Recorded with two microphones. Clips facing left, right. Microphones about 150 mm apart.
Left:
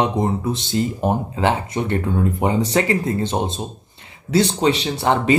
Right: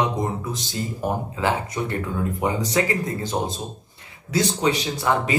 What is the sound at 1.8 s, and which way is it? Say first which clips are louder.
Speech: left 5 dB; 65° left (ahead or behind).